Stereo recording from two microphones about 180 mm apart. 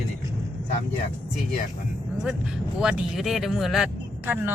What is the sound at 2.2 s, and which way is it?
Speech, 5° right (ahead or behind).